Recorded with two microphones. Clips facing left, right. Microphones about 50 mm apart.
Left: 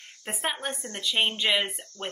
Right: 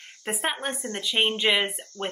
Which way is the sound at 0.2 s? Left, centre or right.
Centre.